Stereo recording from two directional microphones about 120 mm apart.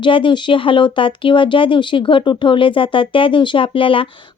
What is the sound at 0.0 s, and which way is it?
Speech, 45° left (ahead or behind).